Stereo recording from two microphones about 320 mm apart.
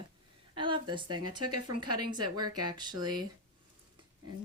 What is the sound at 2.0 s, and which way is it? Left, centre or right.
A woman's voice, centre.